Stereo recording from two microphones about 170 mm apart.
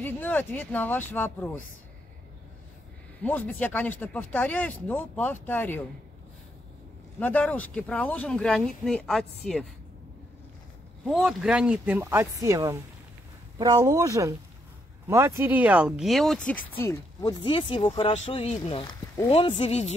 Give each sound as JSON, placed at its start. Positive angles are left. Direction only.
{"t": 0.0, "sound": "speech", "side_deg": 10}
{"t": 3.2, "sound": "speech", "side_deg": 10}
{"t": 7.2, "sound": "speech", "side_deg": 10}
{"t": 11.1, "sound": "speech", "side_deg": 0}